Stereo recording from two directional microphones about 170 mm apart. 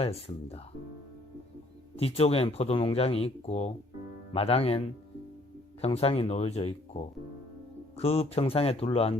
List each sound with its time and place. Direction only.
0.0 s speech: 35° left (ahead or behind)
2.0 s speech: 35° left (ahead or behind)
5.8 s speech: 35° left (ahead or behind)